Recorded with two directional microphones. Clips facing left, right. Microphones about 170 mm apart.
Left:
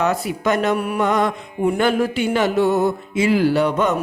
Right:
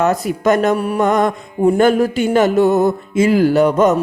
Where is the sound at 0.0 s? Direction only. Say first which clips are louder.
Right 5 dB; 45° right (ahead or behind).